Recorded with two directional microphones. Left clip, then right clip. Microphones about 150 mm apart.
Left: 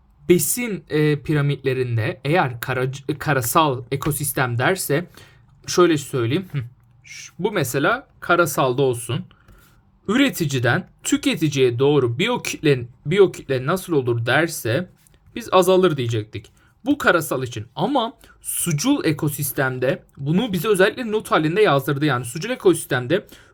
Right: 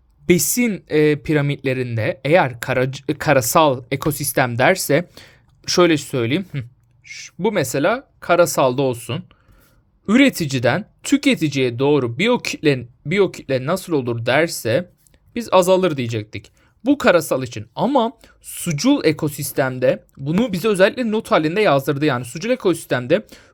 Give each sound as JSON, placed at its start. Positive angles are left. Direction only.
{"t": 0.3, "sound": "speech", "side_deg": -40}